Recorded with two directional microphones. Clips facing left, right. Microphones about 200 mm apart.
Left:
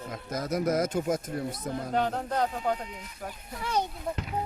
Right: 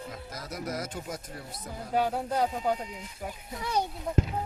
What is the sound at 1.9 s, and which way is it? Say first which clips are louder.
Speech: right 2 dB; 10° right (ahead or behind).